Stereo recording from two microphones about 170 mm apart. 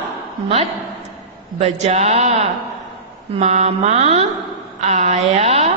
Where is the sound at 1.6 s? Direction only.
40° right (ahead or behind).